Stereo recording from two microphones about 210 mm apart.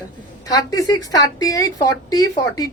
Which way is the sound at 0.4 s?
15° left (ahead or behind).